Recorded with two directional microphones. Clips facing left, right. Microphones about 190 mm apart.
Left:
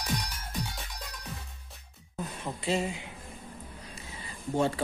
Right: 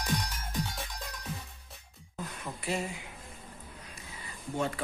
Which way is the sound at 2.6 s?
25° left (ahead or behind).